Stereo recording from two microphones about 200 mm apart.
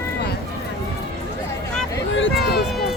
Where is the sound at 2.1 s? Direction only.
65° left (ahead or behind).